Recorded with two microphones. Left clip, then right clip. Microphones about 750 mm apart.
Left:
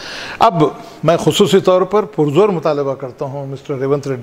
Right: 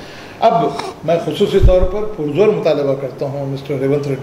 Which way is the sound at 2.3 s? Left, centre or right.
Left.